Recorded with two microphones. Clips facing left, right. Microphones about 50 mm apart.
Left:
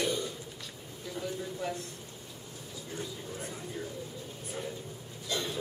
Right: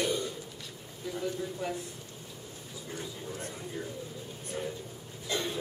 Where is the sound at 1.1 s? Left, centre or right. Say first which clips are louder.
Right 2 dB; centre.